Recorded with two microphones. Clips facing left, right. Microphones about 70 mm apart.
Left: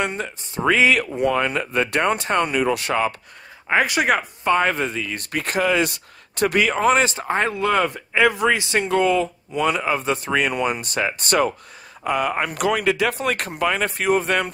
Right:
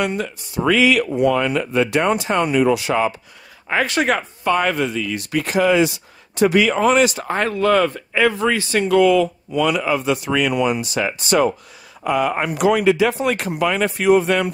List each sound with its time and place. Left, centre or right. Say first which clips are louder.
0.0 s speech: right 3 dB; left
1.0 s speech: right 4 dB; right
1.3 s speech: right 3 dB; left
3.6 s speech: even; centre
4.5 s speech: right 1 dB; left
12.3 s speech: right 2 dB; right
12.5 s speech: right 7 dB; left